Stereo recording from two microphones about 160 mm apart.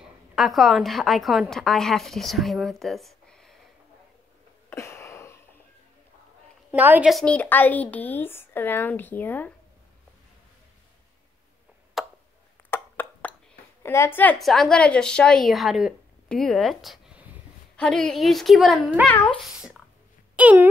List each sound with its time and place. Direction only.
0.4 s a woman's voice: centre (ahead or behind)
4.6 s a sound: 15° left (ahead or behind)
6.7 s a woman's voice: 10° right (ahead or behind)
7.1 s a woman's voice: 5° left (ahead or behind)
12.0 s tick: centre (ahead or behind)
12.6 s a sound: 15° left (ahead or behind)
13.8 s a woman's voice: 15° left (ahead or behind); by 19.1 s centre (ahead or behind)
20.3 s speech: 10° right (ahead or behind)